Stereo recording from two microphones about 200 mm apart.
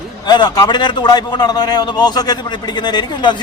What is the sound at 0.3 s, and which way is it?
A man's voice, 20° left (ahead or behind).